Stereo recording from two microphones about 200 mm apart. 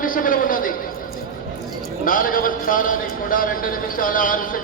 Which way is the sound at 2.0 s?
45° left (ahead or behind).